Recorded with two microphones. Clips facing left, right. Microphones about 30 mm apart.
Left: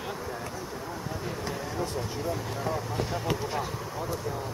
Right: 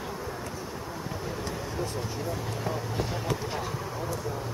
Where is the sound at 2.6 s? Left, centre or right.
Centre.